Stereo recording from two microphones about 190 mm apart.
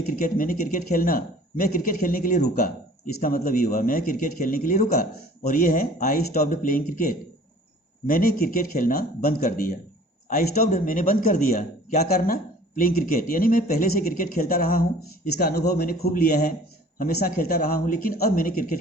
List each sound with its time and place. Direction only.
0.1 s speech: 45° left (ahead or behind)